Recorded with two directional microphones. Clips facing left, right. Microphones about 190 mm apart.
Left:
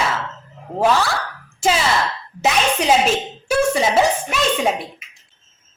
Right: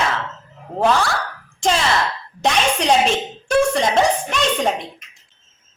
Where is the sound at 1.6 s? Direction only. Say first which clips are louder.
Even; 5° left (ahead or behind).